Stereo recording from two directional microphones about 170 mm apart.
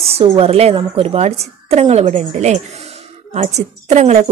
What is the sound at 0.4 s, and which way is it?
Speech, 35° right (ahead or behind).